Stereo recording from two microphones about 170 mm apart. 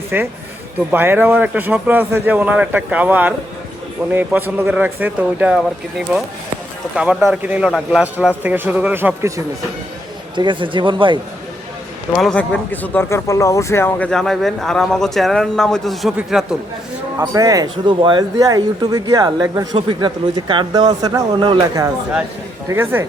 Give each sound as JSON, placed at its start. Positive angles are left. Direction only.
{"t": 0.1, "sound": "speech", "side_deg": -10}
{"t": 6.9, "sound": "speech", "side_deg": -5}
{"t": 10.3, "sound": "speech", "side_deg": -30}
{"t": 12.1, "sound": "speech", "side_deg": 5}
{"t": 17.2, "sound": "speech", "side_deg": -20}
{"t": 22.7, "sound": "speech", "side_deg": -15}